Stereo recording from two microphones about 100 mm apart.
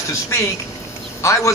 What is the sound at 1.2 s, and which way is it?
Speech, 30° left (ahead or behind).